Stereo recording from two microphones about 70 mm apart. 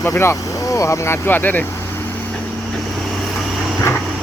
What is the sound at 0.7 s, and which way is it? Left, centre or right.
Speech, left.